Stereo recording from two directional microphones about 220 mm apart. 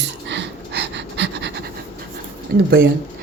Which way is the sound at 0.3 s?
55° right (ahead or behind).